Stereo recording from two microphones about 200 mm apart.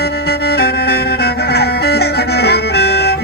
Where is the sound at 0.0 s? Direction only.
55° left (ahead or behind).